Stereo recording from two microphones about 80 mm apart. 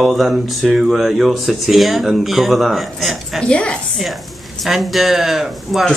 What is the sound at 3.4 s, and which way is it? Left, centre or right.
Speech, centre.